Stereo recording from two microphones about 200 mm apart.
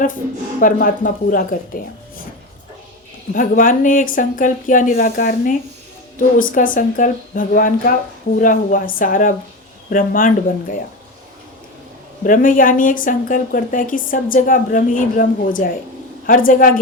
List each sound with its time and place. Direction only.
0.6 s a woman's voice: 45° left (ahead or behind)
3.3 s a woman's voice: 40° left (ahead or behind)
12.2 s a woman's voice: 40° left (ahead or behind)